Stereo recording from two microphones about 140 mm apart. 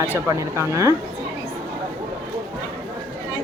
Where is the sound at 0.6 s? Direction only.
20° right (ahead or behind).